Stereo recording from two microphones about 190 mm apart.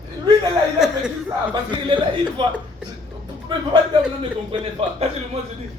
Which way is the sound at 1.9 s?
25° right (ahead or behind).